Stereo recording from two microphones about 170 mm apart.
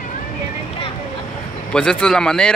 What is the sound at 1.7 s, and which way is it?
Speech, 5° left (ahead or behind).